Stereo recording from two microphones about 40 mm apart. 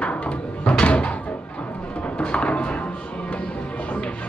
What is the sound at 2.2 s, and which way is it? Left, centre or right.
Music, left.